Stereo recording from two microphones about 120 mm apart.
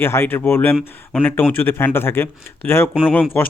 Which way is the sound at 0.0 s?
20° left (ahead or behind).